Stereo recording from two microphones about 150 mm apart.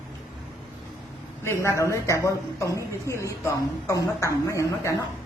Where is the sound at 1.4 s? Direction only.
20° left (ahead or behind).